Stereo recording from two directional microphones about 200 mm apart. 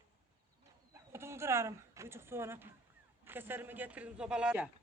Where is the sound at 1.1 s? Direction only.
10° right (ahead or behind).